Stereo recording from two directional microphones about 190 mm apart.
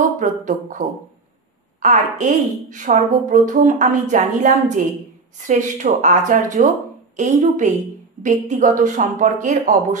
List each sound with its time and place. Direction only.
0.0 s a woman's voice: 40° right (ahead or behind)